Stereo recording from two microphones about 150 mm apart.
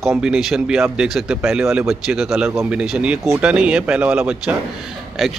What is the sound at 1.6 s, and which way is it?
Speech, 20° right (ahead or behind).